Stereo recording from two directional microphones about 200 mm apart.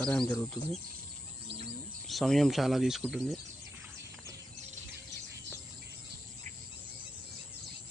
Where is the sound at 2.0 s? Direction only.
Centre (ahead or behind).